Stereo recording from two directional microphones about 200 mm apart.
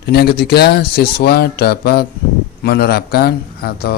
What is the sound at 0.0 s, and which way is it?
Speech, 50° left (ahead or behind).